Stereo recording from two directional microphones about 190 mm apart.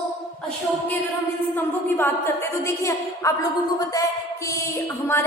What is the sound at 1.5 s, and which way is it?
A woman's voice, 10° left (ahead or behind).